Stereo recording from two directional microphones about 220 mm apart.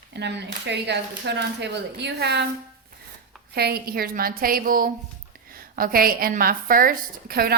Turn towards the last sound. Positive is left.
turn(degrees=-45)  # may be behind; listen again after turning